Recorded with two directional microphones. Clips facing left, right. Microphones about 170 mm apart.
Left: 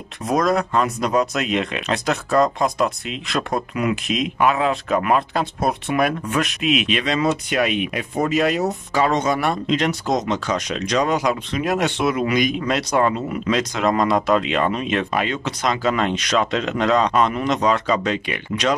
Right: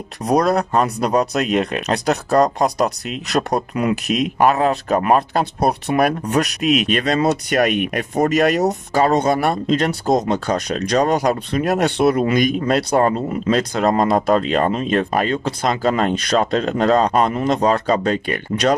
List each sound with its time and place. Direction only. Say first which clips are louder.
0.3 s speech: right 3 dB; 35° right (ahead or behind)